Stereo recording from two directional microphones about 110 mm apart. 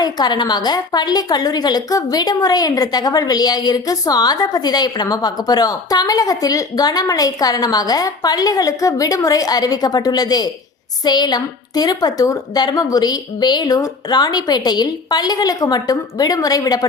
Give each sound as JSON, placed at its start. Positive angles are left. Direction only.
{"t": 0.0, "sound": "a woman's voice", "side_deg": 40}